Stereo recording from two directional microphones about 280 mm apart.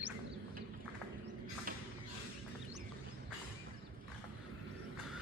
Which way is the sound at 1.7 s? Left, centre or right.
Right.